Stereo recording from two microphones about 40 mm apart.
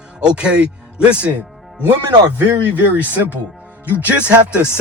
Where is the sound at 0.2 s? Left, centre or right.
Right.